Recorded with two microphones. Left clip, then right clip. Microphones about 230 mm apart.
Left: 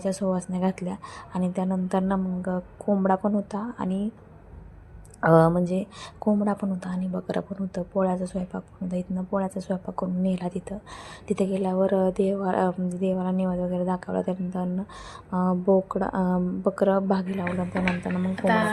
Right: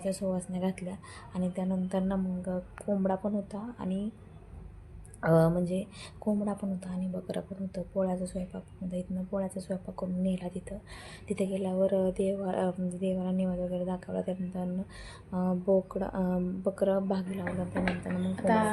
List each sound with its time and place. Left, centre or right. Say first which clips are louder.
0.0 s a woman's voice: left 6 dB; left
5.2 s a woman's voice: left 7 dB; centre
18.3 s a woman's voice: left 4 dB; centre